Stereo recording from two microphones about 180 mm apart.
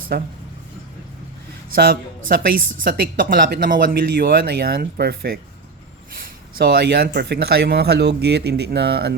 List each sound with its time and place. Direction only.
0.1 s speech: 60° right (ahead or behind)
1.7 s speech: 55° right (ahead or behind)